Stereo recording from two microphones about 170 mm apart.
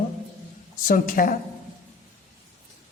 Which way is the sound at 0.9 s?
55° left (ahead or behind).